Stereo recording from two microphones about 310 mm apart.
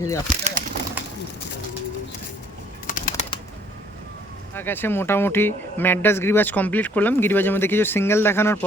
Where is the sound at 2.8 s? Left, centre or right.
Centre.